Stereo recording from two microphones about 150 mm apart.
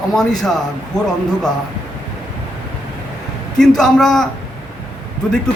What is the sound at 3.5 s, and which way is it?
Speech, 5° left (ahead or behind).